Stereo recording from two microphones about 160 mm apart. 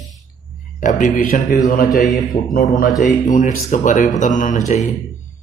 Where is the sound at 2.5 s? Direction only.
60° left (ahead or behind).